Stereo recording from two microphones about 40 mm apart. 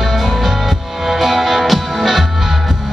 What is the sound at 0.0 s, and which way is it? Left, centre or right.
Music, centre.